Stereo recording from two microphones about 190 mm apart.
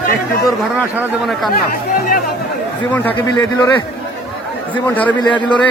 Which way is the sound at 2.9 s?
10° left (ahead or behind).